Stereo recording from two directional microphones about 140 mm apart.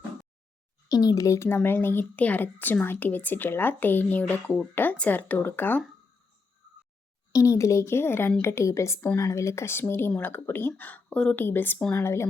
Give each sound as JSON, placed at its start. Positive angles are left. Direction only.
{"t": 0.9, "sound": "speech", "side_deg": 25}
{"t": 7.3, "sound": "speech", "side_deg": 20}